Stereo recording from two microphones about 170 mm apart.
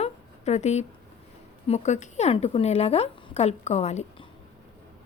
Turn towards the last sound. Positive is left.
turn(degrees=40)  # may be behind; listen again after turning